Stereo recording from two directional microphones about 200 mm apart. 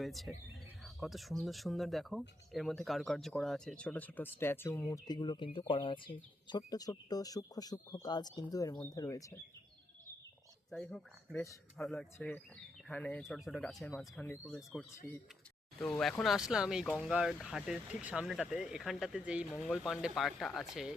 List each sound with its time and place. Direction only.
0.0 s speech: centre (ahead or behind); by 9.3 s 15° left (ahead or behind)
10.7 s speech: 5° left (ahead or behind)